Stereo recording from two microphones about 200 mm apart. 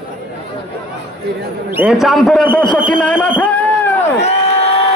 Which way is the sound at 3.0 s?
5° left (ahead or behind).